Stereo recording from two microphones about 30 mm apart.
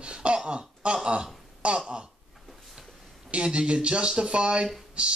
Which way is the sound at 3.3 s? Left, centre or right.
Right.